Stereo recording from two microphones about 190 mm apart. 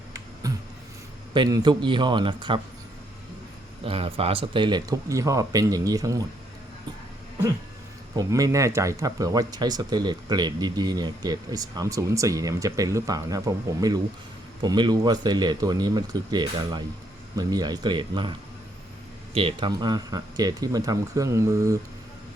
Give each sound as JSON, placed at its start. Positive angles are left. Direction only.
{"t": 0.4, "sound": "a sound", "side_deg": -20}
{"t": 1.3, "sound": "speech", "side_deg": -20}
{"t": 3.8, "sound": "speech", "side_deg": -30}
{"t": 8.1, "sound": "speech", "side_deg": -20}